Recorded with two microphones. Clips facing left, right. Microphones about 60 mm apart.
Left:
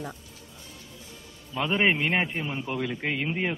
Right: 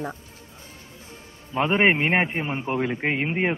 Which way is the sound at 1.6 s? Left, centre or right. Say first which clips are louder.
Right 4 dB; right.